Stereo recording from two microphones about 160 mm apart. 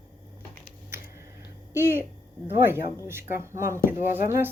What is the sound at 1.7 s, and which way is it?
Speech, 15° right (ahead or behind).